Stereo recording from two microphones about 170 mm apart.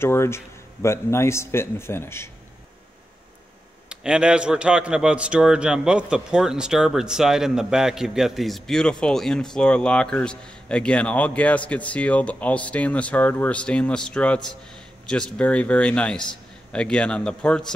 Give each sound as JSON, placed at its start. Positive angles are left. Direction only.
{"t": 0.0, "sound": "a man's voice", "side_deg": 15}
{"t": 3.9, "sound": "a man's voice", "side_deg": -5}